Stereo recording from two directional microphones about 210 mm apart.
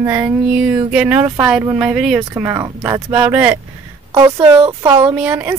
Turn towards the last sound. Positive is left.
turn(degrees=-10)  # may be behind; listen again after turning